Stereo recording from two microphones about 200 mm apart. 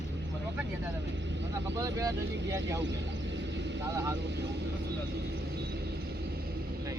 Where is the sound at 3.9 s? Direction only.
15° right (ahead or behind).